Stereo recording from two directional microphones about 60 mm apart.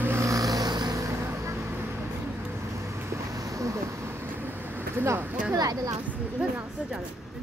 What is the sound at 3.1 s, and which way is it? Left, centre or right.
Vehicle, right.